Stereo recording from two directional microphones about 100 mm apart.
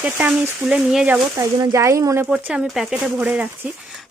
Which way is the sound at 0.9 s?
5° right (ahead or behind).